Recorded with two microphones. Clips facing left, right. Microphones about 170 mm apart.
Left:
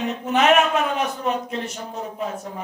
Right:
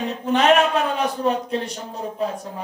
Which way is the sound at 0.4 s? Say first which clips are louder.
Even; 35° right (ahead or behind).